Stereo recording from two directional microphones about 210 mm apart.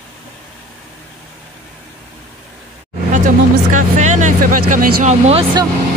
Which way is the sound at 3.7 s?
35° right (ahead or behind).